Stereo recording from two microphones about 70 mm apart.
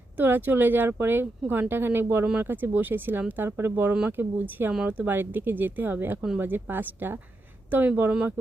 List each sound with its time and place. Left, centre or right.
0.2 s speech: right